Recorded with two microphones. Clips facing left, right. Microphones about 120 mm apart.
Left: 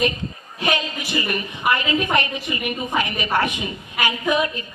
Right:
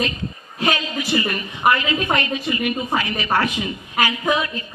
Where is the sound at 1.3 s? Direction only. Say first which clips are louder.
Even; 20° left (ahead or behind).